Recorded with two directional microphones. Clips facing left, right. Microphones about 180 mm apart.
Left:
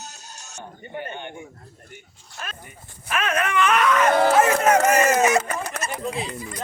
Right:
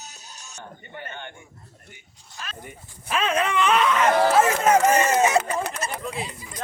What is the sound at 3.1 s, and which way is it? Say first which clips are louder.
Wail: even; 30° right (ahead or behind).